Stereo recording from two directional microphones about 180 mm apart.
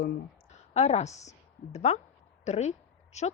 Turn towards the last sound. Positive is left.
turn(degrees=40)  # may be behind; listen again after turning